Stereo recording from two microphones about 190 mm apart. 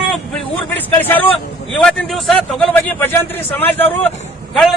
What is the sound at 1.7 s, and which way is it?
Speech, 5° left (ahead or behind).